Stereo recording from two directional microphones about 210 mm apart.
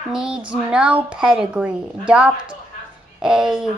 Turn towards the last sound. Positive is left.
turn(degrees=-5)  # may be behind; listen again after turning